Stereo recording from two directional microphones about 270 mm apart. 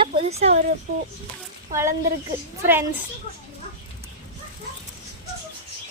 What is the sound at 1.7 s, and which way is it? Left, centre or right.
Speech, centre.